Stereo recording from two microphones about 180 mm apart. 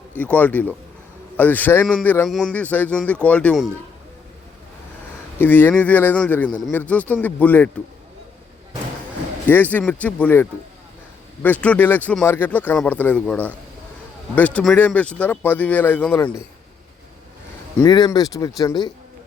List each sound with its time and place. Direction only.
0.2 s a man's voice: 10° left (ahead or behind)
5.4 s a man's voice: 10° left (ahead or behind)
9.5 s a man's voice: 10° left (ahead or behind)
17.7 s speech: 20° left (ahead or behind)